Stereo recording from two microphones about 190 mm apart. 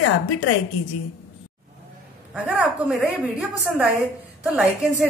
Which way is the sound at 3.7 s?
5° right (ahead or behind).